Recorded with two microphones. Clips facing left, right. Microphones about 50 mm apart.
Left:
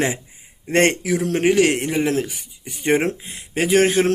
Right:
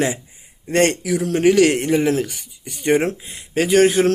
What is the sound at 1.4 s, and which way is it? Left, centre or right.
Speech, left.